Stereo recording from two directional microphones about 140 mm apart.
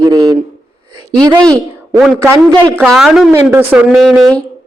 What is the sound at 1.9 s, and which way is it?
A woman's voice, 5° right (ahead or behind).